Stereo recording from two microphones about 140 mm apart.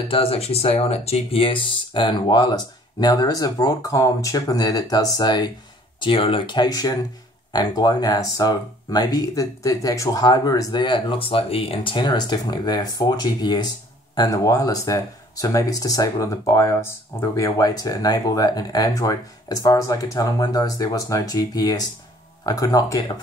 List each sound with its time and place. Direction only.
0.1 s speech: 45° left (ahead or behind)